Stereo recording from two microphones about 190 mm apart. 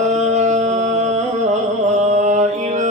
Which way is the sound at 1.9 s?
35° right (ahead or behind).